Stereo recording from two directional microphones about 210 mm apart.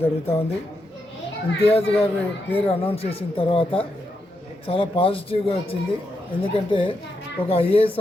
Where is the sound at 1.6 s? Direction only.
30° left (ahead or behind).